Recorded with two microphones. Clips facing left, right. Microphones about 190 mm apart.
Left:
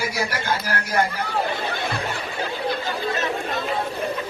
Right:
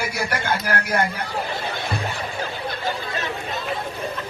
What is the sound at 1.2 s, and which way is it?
Speech, 60° left (ahead or behind).